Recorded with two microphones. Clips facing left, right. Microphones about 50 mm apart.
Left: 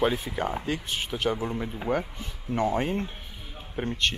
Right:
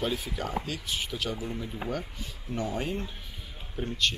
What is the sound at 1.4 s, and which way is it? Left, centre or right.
Speech, left.